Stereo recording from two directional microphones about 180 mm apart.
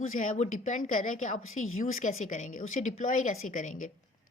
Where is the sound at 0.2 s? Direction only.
45° left (ahead or behind).